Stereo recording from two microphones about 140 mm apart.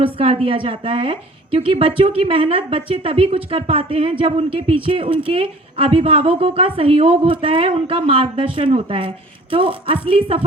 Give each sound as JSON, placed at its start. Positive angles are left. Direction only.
{"t": 0.0, "sound": "a woman's voice", "side_deg": -45}